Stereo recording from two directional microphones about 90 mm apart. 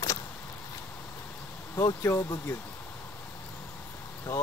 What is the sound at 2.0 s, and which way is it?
Speech, 30° left (ahead or behind).